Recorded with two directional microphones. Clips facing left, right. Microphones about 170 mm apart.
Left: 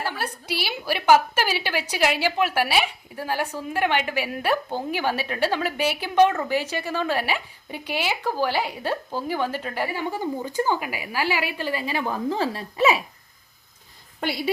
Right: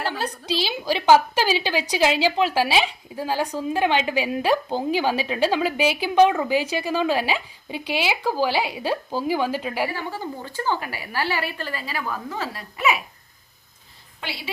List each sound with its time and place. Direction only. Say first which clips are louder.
0.6 s a woman's voice: right 2 dB; 15° right (ahead or behind)
9.9 s a woman's voice: left 3 dB; 15° left (ahead or behind)
14.2 s a woman's voice: left 8 dB; 45° left (ahead or behind)